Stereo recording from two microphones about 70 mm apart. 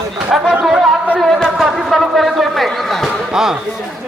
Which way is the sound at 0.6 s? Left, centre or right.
Centre.